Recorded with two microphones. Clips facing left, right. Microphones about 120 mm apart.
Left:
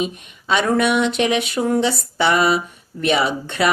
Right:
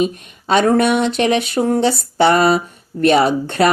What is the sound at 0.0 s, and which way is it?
A woman's voice, 40° right (ahead or behind).